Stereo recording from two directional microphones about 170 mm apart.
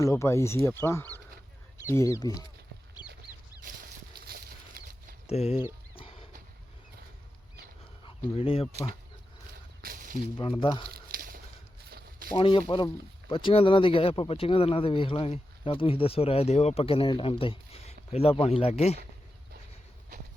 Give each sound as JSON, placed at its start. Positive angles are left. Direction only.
{"t": 0.0, "sound": "speech", "side_deg": 15}
{"t": 4.3, "sound": "horse", "side_deg": -65}
{"t": 5.3, "sound": "speech", "side_deg": 35}
{"t": 6.0, "sound": "a sound", "side_deg": 35}
{"t": 8.4, "sound": "speech", "side_deg": 35}
{"t": 9.8, "sound": "a sound", "side_deg": -55}
{"t": 10.3, "sound": "speech", "side_deg": 30}
{"t": 10.8, "sound": "a sound", "side_deg": -60}
{"t": 12.3, "sound": "speech", "side_deg": 30}